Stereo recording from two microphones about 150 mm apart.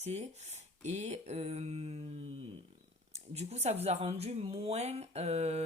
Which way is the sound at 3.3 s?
45° right (ahead or behind).